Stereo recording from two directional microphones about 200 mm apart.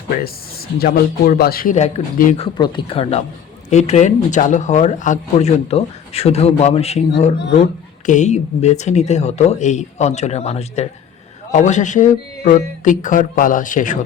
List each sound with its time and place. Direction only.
0.8 s speech: 50° left (ahead or behind)
2.4 s speech: 25° left (ahead or behind)